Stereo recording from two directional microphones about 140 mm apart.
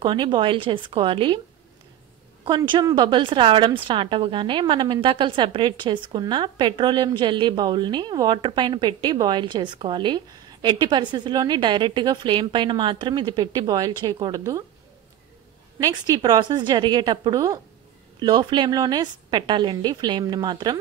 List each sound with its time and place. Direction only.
0.0 s a woman's voice: 35° right (ahead or behind)
2.4 s a woman's voice: 35° right (ahead or behind)
15.8 s a woman's voice: 30° right (ahead or behind)